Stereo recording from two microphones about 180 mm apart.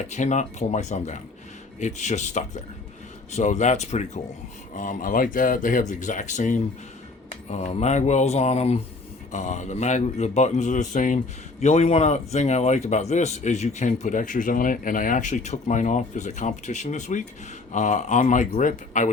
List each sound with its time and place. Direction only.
0.0 s speech: 40° left (ahead or behind)